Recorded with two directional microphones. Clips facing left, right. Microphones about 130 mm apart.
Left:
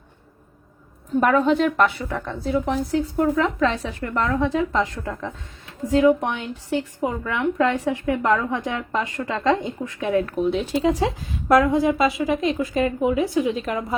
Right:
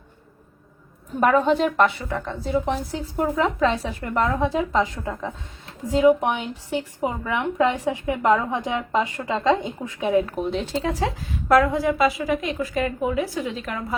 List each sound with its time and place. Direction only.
1.5 s a woman's voice: centre (ahead or behind)
4.7 s a woman's voice: 5° right (ahead or behind)
5.9 s a woman's voice: 20° right (ahead or behind)
10.4 s a woman's voice: centre (ahead or behind)
10.7 s a woman's voice: 20° left (ahead or behind)